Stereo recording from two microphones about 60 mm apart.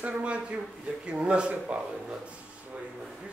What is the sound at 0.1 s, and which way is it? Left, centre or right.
Speech, centre.